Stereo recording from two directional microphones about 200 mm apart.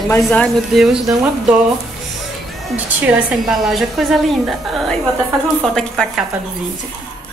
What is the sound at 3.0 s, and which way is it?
Speech, 5° right (ahead or behind).